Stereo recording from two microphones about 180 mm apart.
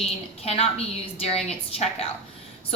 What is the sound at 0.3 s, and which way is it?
A woman's voice, 35° left (ahead or behind).